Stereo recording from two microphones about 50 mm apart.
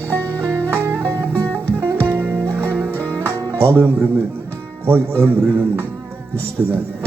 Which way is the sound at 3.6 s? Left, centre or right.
Right.